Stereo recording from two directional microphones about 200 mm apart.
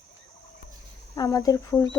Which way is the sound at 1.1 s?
20° left (ahead or behind).